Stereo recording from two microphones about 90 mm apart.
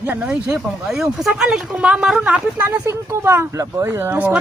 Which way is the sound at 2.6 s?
30° right (ahead or behind).